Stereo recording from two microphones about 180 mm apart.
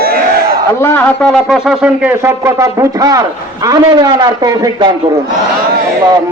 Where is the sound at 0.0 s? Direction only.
55° right (ahead or behind).